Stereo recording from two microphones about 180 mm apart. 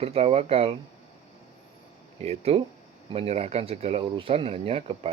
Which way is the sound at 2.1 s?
35° right (ahead or behind).